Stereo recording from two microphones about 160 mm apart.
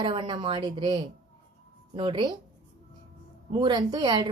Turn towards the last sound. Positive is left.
turn(degrees=-25)  # may be behind; listen again after turning